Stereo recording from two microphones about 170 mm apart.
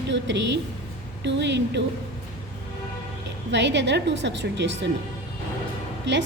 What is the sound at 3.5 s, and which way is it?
A woman's voice, 90° right.